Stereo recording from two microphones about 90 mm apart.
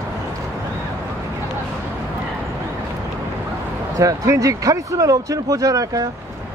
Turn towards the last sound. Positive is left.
turn(degrees=-40)  # may be behind; listen again after turning